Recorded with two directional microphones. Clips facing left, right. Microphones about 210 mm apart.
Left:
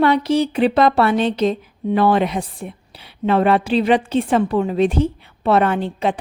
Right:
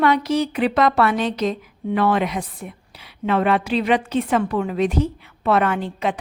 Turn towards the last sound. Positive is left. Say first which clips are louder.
# left 3 dB
turn(degrees=30)  # may be behind; listen again after turning